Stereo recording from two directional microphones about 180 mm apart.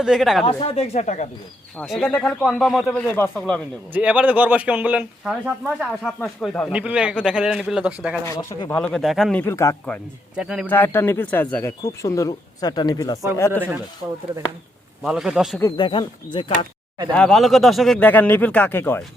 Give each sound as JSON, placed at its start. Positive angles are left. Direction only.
{"t": 0.0, "sound": "speech", "side_deg": 0}
{"t": 0.4, "sound": "speech", "side_deg": 30}
{"t": 1.7, "sound": "speech", "side_deg": 5}
{"t": 3.9, "sound": "speech", "side_deg": -10}
{"t": 8.2, "sound": "speech", "side_deg": 15}
{"t": 8.7, "sound": "speech", "side_deg": 5}
{"t": 9.4, "sound": "a man's voice", "side_deg": 15}
{"t": 10.3, "sound": "speech", "side_deg": -5}
{"t": 10.7, "sound": "a man's voice", "side_deg": 10}
{"t": 13.5, "sound": "speech", "side_deg": -10}
{"t": 15.0, "sound": "speech", "side_deg": -5}
{"t": 15.8, "sound": "speech", "side_deg": 25}
{"t": 17.2, "sound": "a man's voice", "side_deg": 0}